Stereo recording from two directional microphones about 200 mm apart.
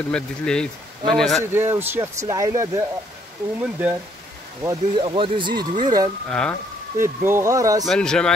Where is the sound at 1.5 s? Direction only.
10° right (ahead or behind).